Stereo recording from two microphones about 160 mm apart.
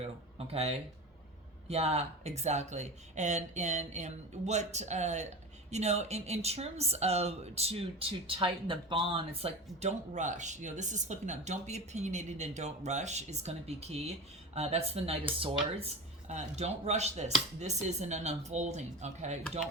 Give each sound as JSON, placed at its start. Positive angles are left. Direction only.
{"t": 0.3, "sound": "speech", "side_deg": -40}